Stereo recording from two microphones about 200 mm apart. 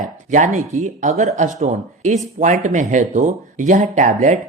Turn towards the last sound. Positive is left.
turn(degrees=-35)  # may be behind; listen again after turning